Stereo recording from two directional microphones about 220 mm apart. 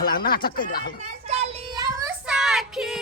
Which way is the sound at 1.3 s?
30° right (ahead or behind).